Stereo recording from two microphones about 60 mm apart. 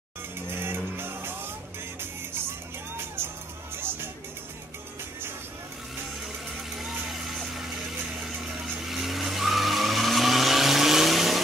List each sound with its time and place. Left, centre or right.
0.5 s music: right
3.2 s music: right
8.8 s vehicle: centre